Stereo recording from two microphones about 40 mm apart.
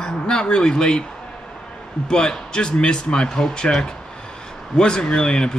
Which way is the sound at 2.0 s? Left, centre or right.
Left.